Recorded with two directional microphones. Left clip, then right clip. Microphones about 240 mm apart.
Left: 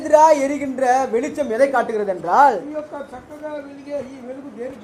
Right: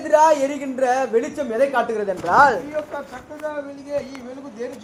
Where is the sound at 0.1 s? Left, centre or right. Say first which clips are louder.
Left 2 dB; centre.